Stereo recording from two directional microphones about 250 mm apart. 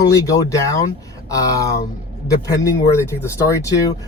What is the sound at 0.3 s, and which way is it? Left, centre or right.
A man's voice, centre.